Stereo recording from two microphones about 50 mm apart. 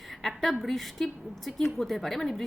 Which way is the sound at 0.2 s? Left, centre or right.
Centre.